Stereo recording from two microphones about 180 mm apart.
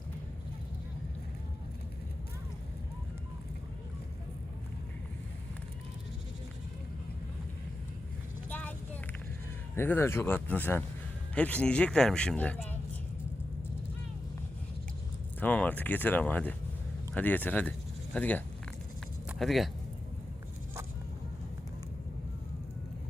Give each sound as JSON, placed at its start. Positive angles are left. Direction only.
{"t": 8.4, "sound": "vehicle", "side_deg": 10}
{"t": 9.7, "sound": "speech", "side_deg": 15}
{"t": 15.4, "sound": "speech", "side_deg": 10}